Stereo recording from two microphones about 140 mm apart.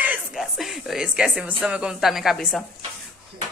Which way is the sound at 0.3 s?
Centre (ahead or behind).